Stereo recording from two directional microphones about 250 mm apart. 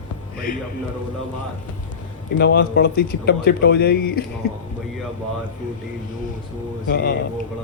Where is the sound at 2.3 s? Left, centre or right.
Left.